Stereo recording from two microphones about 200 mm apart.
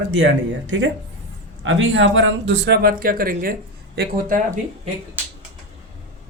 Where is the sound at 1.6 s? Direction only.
70° right (ahead or behind); by 4.4 s 45° right (ahead or behind).